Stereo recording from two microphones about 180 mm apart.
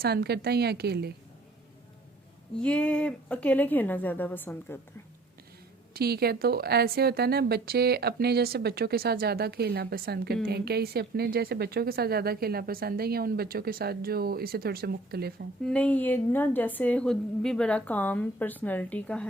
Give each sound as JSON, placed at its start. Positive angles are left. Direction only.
{"t": 0.0, "sound": "a woman's voice", "side_deg": -65}
{"t": 2.6, "sound": "a woman's voice", "side_deg": 5}
{"t": 5.9, "sound": "a woman's voice", "side_deg": -60}
{"t": 15.6, "sound": "a woman's voice", "side_deg": 5}